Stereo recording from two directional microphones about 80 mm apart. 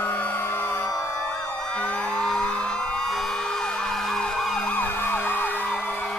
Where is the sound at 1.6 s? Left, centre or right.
Centre.